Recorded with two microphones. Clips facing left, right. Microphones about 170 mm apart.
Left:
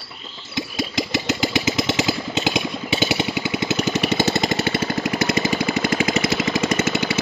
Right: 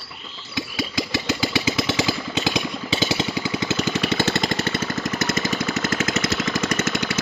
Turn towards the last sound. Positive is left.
turn(degrees=10)  # may be behind; listen again after turning